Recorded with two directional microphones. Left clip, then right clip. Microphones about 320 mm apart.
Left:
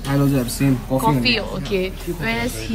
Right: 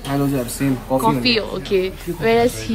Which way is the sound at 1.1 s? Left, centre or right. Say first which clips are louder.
Even; centre.